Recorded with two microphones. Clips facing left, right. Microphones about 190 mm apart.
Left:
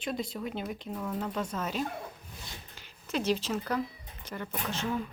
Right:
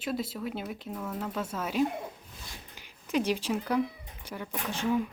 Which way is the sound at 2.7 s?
15° right (ahead or behind).